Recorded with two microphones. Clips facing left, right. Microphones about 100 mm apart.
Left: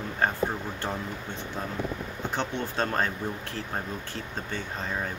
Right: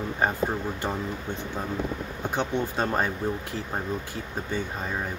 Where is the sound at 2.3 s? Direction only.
10° right (ahead or behind).